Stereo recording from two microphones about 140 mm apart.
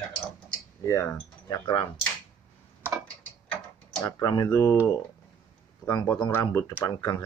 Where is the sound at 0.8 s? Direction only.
20° left (ahead or behind).